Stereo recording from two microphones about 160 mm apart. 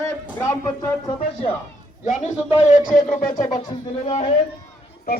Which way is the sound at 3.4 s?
25° left (ahead or behind).